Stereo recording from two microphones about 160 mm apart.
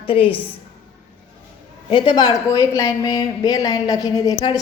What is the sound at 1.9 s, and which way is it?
Speech, 30° left (ahead or behind).